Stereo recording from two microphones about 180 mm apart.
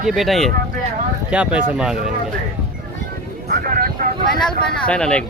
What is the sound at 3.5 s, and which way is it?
Speech, 55° right (ahead or behind).